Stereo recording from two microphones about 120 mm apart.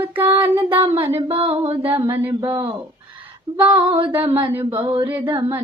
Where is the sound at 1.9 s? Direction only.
30° right (ahead or behind).